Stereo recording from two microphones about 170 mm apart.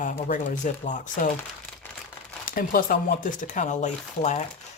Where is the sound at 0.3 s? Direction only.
50° left (ahead or behind).